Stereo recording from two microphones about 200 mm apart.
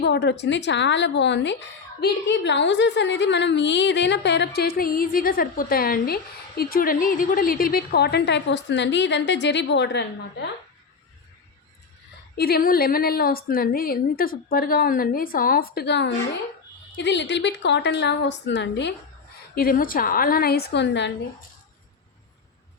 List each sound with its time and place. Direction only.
0.0 s a woman's voice: 55° left (ahead or behind)
12.4 s a woman's voice: 50° left (ahead or behind)
19.5 s a woman's voice: 45° left (ahead or behind)